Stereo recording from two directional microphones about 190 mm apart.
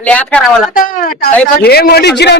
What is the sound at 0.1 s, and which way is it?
Speech, 5° left (ahead or behind).